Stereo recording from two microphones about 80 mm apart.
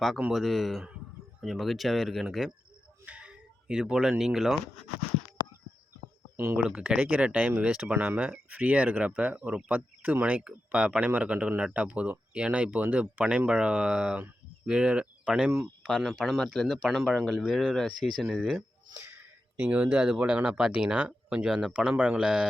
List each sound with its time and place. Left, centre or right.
0.3 s speech: centre
3.1 s a sound: centre
4.2 s speech: centre
6.3 s speech: right
6.6 s speech: centre
15.8 s speech: centre
19.5 s speech: centre
21.8 s speech: centre